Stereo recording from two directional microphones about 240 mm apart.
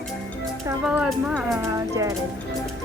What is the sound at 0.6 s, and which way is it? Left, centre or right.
Speech, centre.